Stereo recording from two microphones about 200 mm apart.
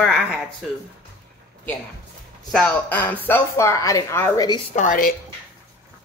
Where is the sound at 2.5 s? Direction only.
5° left (ahead or behind).